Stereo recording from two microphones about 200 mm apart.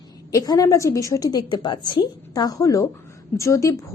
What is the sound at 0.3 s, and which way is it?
A woman's voice, 20° left (ahead or behind).